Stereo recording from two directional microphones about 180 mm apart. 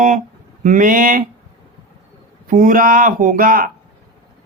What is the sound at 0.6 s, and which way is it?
Speech, 50° right (ahead or behind).